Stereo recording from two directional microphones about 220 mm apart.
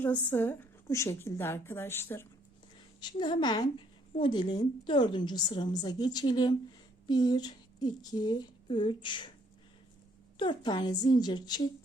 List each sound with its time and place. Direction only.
0.0 s a woman's voice: 10° left (ahead or behind)
10.3 s a woman's voice: 20° left (ahead or behind)